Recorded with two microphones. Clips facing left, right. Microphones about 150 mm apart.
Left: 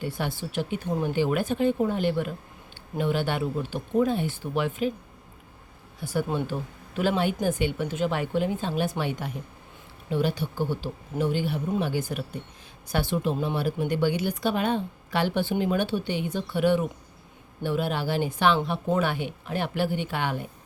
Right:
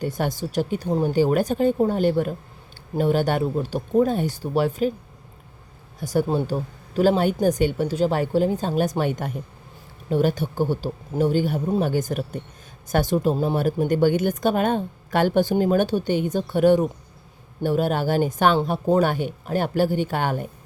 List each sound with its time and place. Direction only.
0.0 s speech: 45° right (ahead or behind)
6.0 s speech: 40° right (ahead or behind)